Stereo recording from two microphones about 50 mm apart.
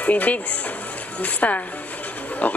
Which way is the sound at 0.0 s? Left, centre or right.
Left.